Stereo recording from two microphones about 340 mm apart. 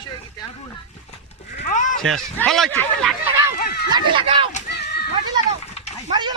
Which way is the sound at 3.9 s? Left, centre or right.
Centre.